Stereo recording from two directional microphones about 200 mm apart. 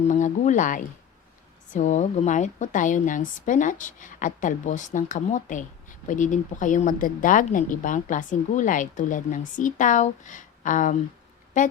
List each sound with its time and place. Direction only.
0.1 s speech: 40° left (ahead or behind)